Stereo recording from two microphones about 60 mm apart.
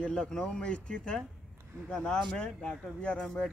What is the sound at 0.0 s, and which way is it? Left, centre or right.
Speech, centre.